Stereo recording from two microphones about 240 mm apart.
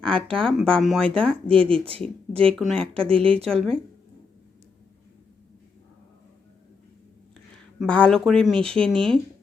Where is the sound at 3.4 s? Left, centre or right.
Centre.